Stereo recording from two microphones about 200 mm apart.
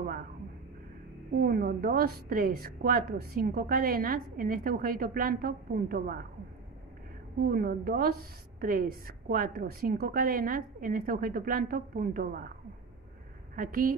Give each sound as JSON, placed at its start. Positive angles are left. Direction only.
{"t": 1.4, "sound": "a woman's voice", "side_deg": -45}
{"t": 7.4, "sound": "a woman's voice", "side_deg": -45}
{"t": 13.6, "sound": "a woman's voice", "side_deg": -45}